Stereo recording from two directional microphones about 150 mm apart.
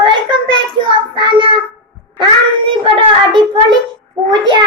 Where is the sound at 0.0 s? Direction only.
30° right (ahead or behind).